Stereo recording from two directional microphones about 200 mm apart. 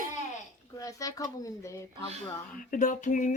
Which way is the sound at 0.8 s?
15° left (ahead or behind).